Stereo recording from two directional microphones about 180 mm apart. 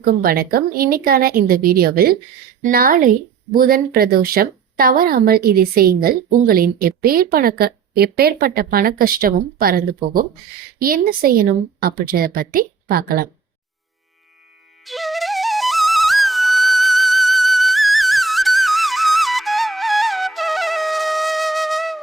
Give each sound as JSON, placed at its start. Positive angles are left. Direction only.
{"t": 0.0, "sound": "speech", "side_deg": -55}
{"t": 14.8, "sound": "flute", "side_deg": 0}